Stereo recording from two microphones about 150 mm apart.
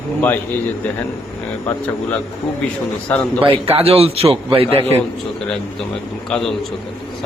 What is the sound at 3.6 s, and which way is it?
A man's voice, 40° right (ahead or behind).